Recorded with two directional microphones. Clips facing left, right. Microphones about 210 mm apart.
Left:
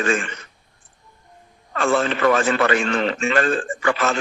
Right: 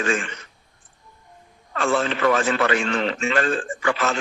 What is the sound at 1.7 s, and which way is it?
A man's voice, 50° left (ahead or behind).